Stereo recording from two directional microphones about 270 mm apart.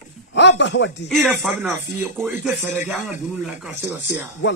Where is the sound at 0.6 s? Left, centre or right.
Left.